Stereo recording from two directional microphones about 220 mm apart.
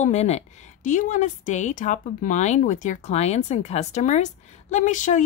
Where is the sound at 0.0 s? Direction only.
30° left (ahead or behind).